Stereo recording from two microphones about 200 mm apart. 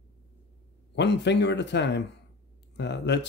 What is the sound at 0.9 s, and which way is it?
Speech, 60° left (ahead or behind).